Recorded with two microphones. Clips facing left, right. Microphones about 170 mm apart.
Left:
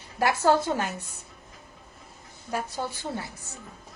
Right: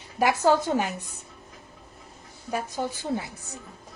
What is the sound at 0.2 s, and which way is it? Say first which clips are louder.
Speech: right 1 dB; 15° right (ahead or behind).